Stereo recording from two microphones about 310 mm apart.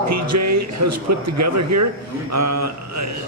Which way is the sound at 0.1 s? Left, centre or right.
Right.